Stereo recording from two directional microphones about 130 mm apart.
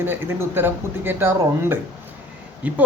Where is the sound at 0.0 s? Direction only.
15° right (ahead or behind).